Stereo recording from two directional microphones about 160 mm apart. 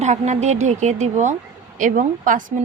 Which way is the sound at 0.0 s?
45° right (ahead or behind).